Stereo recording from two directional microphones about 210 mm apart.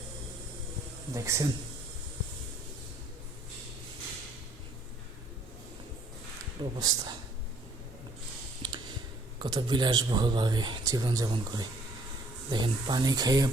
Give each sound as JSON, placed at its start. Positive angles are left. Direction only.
{"t": 1.1, "sound": "speech", "side_deg": -15}
{"t": 6.6, "sound": "speech", "side_deg": -20}
{"t": 8.6, "sound": "a sound", "side_deg": -25}
{"t": 9.4, "sound": "speech", "side_deg": -20}